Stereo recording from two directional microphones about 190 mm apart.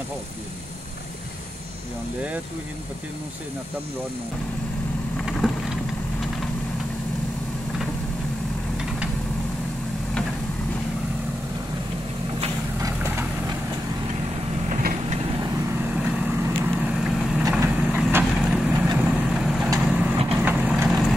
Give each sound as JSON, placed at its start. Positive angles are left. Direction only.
{"t": 5.2, "sound": "boat", "side_deg": 0}
{"t": 12.8, "sound": "vehicle", "side_deg": -15}
{"t": 14.8, "sound": "vehicle", "side_deg": -45}
{"t": 15.4, "sound": "vehicle", "side_deg": -10}